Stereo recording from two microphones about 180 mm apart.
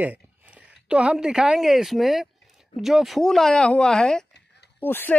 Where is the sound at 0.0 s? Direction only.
10° right (ahead or behind).